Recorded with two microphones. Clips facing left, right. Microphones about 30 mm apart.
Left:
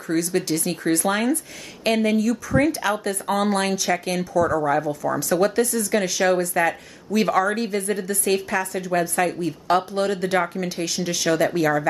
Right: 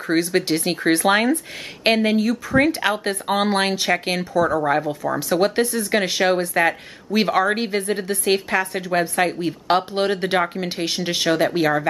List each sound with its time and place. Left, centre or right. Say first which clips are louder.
0.1 s speech: right 3 dB; right